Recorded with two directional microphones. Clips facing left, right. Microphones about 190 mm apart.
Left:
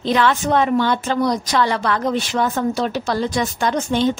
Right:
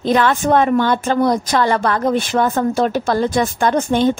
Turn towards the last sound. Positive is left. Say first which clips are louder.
# right 3 dB
turn(degrees=-50)  # may be behind; listen again after turning